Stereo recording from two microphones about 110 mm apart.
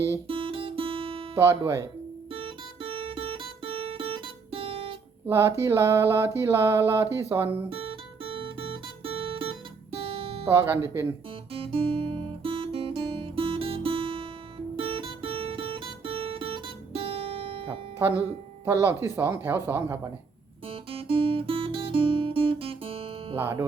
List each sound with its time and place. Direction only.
0.3 s guitar: 55° right (ahead or behind)
1.4 s speech: 25° right (ahead or behind)
2.3 s music: 55° right (ahead or behind)
5.2 s speech: 25° right (ahead or behind)
7.7 s guitar: 55° right (ahead or behind)
10.5 s speech: 25° right (ahead or behind)
11.5 s guitar: 55° right (ahead or behind)
18.6 s speech: 25° right (ahead or behind)
20.7 s guitar: 55° right (ahead or behind)
23.4 s speech: 25° right (ahead or behind)